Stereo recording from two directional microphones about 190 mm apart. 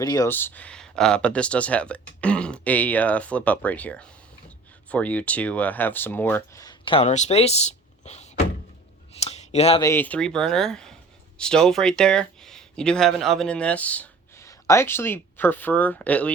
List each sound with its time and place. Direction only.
0.0 s speech: 20° left (ahead or behind); by 8.3 s 35° left (ahead or behind)
9.2 s a sound: 35° left (ahead or behind)
9.8 s speech: 10° left (ahead or behind)